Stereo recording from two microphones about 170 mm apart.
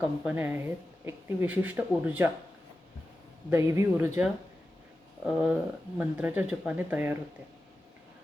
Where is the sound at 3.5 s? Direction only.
15° right (ahead or behind).